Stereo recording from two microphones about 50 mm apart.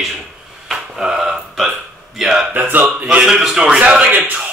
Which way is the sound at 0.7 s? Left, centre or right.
Centre.